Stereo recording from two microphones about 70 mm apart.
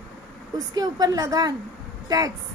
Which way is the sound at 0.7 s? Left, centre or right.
Right.